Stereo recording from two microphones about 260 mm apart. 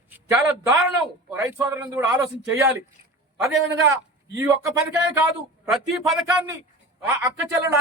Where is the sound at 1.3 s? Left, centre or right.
Centre.